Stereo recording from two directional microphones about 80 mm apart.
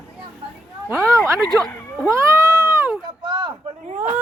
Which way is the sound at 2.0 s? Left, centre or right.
Right.